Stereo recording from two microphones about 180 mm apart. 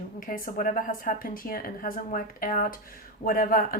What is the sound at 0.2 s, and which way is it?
Speech, 50° left (ahead or behind).